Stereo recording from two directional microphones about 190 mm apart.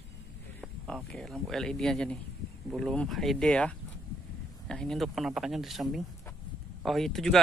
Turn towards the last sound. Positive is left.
turn(degrees=0)  # may be behind; listen again after turning